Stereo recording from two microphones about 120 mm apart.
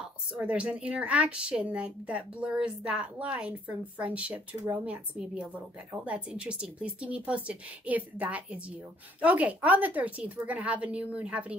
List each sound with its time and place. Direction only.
0.4 s speech: 10° right (ahead or behind)